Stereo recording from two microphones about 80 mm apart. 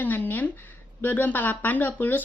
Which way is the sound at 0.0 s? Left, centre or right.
Left.